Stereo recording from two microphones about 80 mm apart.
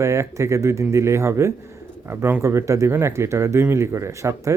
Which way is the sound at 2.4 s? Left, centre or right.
Right.